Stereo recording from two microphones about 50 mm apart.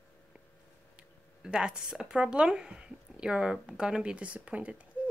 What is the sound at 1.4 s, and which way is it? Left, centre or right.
Speech, centre.